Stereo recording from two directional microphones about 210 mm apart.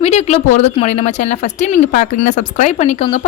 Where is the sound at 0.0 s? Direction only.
30° left (ahead or behind).